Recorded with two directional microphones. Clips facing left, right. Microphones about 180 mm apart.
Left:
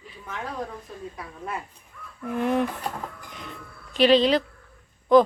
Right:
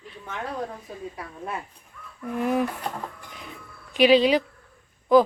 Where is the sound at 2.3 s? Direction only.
5° right (ahead or behind).